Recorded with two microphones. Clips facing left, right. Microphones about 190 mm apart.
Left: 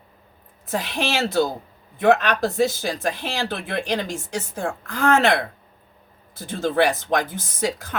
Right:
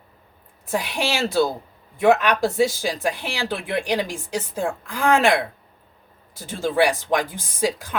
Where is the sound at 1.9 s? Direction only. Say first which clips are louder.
Right 1 dB; 10° right (ahead or behind).